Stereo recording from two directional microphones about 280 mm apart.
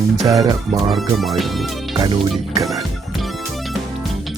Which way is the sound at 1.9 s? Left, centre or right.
Centre.